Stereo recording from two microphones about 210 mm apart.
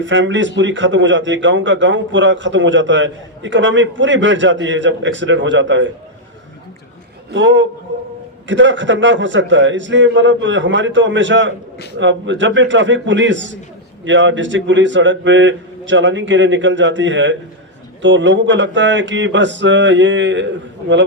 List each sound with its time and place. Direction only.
0.0 s a man's voice: 60° right (ahead or behind)
7.3 s a man's voice: 60° right (ahead or behind)